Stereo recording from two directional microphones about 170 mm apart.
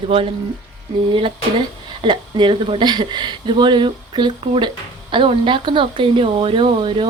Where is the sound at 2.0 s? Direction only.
30° right (ahead or behind).